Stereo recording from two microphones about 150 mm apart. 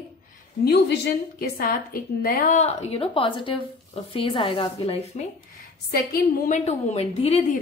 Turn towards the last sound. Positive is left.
turn(degrees=45)  # may be behind; listen again after turning